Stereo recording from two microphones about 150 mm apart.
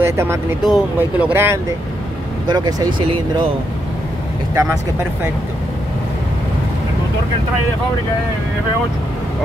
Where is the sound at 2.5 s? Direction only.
25° right (ahead or behind).